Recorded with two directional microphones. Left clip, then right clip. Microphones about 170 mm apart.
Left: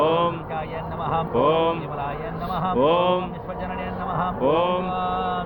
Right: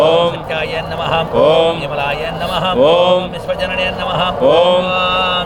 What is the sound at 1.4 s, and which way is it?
Mantra, 15° right (ahead or behind).